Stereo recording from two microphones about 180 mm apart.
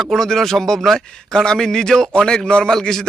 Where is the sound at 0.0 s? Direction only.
Centre (ahead or behind).